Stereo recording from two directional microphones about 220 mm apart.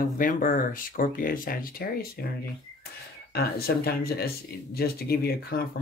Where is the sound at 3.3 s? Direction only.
45° left (ahead or behind).